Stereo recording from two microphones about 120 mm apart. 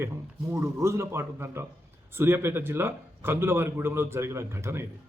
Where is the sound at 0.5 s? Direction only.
25° right (ahead or behind).